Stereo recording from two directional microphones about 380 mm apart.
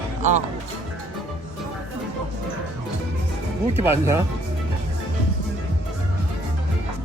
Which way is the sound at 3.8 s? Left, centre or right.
Centre.